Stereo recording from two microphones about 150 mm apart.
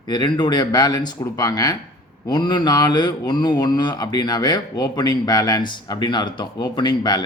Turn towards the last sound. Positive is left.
turn(degrees=30)  # may be behind; listen again after turning